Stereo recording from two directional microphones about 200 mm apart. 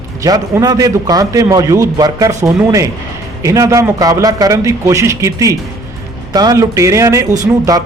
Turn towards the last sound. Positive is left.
turn(degrees=-15)  # may be behind; listen again after turning